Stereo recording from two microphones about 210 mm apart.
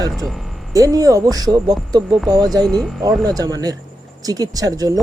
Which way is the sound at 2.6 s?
Centre (ahead or behind).